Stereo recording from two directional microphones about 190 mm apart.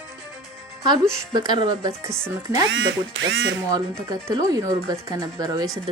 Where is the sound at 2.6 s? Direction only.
80° right.